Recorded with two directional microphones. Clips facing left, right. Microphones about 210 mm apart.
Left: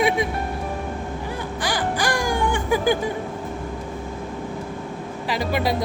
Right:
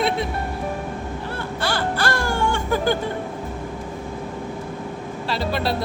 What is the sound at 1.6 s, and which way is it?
Music, 15° left (ahead or behind).